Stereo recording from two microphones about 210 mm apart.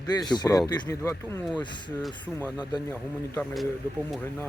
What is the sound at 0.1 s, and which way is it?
Speech, 20° left (ahead or behind).